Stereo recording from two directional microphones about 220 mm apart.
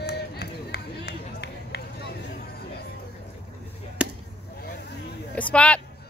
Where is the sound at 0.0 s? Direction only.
45° left (ahead or behind).